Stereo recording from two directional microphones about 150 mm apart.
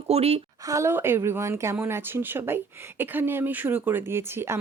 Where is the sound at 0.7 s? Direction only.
15° right (ahead or behind).